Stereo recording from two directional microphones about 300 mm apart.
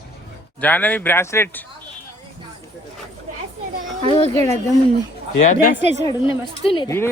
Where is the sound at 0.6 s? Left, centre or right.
Centre.